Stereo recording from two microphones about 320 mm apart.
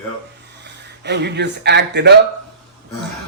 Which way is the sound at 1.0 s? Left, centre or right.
Right.